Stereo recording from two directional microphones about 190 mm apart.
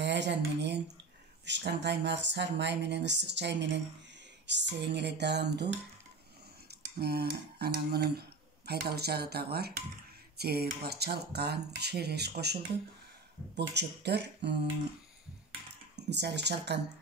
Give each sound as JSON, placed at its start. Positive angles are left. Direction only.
{"t": 0.0, "sound": "speech", "side_deg": -65}
{"t": 6.7, "sound": "speech", "side_deg": -55}
{"t": 13.6, "sound": "speech", "side_deg": -60}
{"t": 16.1, "sound": "speech", "side_deg": -65}